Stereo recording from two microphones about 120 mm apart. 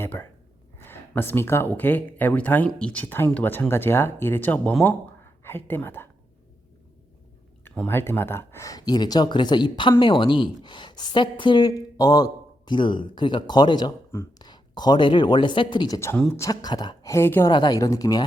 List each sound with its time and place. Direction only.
0.0 s gasp: 15° left (ahead or behind)
0.8 s speech: 20° left (ahead or behind)
7.6 s a woman's voice: 15° left (ahead or behind); by 16.0 s 40° left (ahead or behind)
16.1 s speech: 10° left (ahead or behind)
16.4 s a woman's voice: 30° left (ahead or behind)
17.1 s a woman's voice: 20° left (ahead or behind)
17.5 s a woman's voice: 35° left (ahead or behind)